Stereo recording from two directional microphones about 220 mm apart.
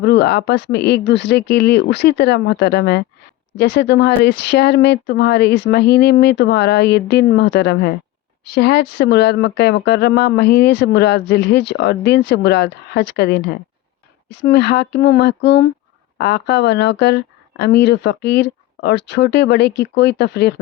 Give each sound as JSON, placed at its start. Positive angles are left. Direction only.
{"t": 0.0, "sound": "speech", "side_deg": 50}
{"t": 14.4, "sound": "speech", "side_deg": 50}